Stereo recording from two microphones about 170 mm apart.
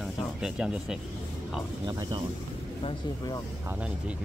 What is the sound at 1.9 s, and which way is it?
Speech, 25° right (ahead or behind).